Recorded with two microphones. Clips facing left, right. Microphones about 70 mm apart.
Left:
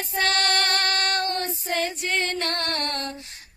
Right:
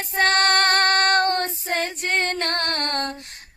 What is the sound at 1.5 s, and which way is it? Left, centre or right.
Female singing, right.